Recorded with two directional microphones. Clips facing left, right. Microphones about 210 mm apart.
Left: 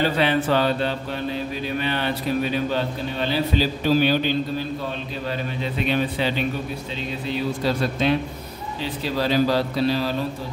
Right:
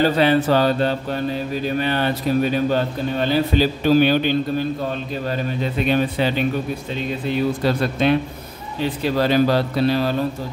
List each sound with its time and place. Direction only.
0.0 s mantra: 40° right (ahead or behind)
5.9 s mantra: 45° right (ahead or behind)
7.6 s speech: 60° right (ahead or behind)